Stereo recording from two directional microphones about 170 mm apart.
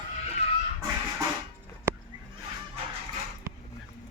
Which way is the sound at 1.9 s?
15° right (ahead or behind).